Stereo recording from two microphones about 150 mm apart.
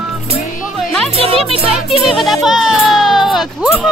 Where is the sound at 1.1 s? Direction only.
40° right (ahead or behind).